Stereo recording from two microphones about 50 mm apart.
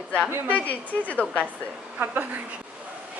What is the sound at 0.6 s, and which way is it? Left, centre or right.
Speech, left.